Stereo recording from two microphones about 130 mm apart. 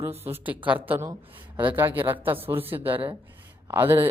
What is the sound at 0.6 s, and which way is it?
Speech, 15° right (ahead or behind).